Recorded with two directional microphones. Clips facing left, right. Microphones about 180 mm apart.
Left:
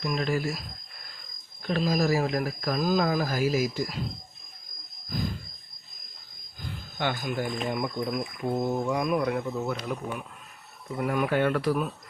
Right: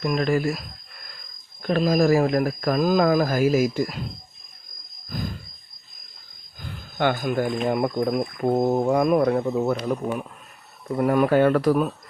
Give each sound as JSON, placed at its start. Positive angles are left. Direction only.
{"t": 0.0, "sound": "speech", "side_deg": -60}
{"t": 1.6, "sound": "speech", "side_deg": -55}
{"t": 7.0, "sound": "speech", "side_deg": -50}
{"t": 7.8, "sound": "speech", "side_deg": -60}